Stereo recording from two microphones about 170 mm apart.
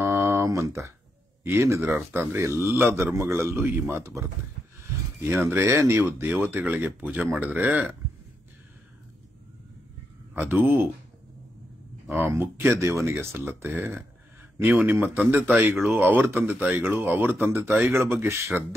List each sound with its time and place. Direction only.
0.0 s a sound: 10° right (ahead or behind)
1.4 s a man's voice: 15° right (ahead or behind)
10.3 s a man's voice: 10° right (ahead or behind)
12.1 s a man's voice: 10° right (ahead or behind)